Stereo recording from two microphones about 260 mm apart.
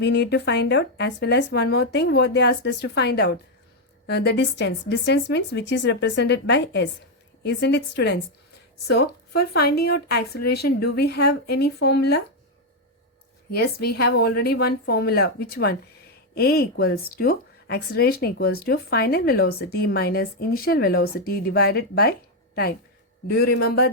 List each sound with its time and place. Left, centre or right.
0.0 s a woman's voice: left
9.4 s a woman's voice: left
13.5 s a woman's voice: left
23.2 s a woman's voice: left